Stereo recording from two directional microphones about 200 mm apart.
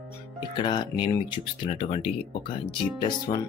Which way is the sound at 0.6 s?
25° left (ahead or behind).